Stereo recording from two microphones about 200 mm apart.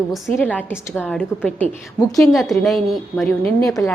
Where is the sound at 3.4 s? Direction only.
30° right (ahead or behind).